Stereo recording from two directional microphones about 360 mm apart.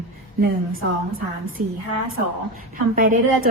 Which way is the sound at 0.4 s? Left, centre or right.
Right.